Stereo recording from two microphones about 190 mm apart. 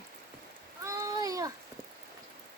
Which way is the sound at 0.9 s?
15° right (ahead or behind).